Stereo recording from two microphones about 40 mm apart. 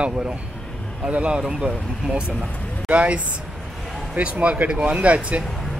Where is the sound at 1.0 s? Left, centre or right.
Right.